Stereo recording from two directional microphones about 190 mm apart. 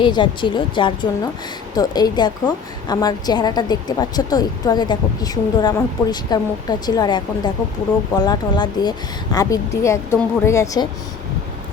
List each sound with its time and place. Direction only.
0.0 s a woman's voice: 25° left (ahead or behind)